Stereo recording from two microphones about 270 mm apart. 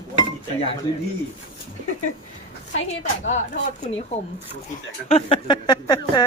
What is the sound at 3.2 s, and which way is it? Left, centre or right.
Speech, left.